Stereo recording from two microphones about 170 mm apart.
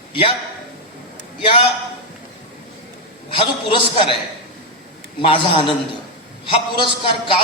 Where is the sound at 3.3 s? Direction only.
30° left (ahead or behind).